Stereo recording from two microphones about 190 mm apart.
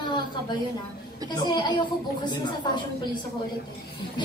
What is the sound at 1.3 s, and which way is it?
A woman's voice, 20° left (ahead or behind).